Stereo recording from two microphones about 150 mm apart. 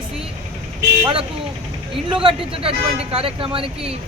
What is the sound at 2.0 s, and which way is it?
Speech, 35° right (ahead or behind).